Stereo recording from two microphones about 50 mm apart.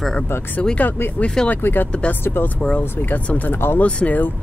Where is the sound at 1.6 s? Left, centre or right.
Left.